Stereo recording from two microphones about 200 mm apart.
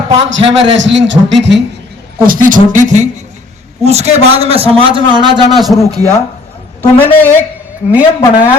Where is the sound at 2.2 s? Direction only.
45° right (ahead or behind); by 5.0 s 25° right (ahead or behind).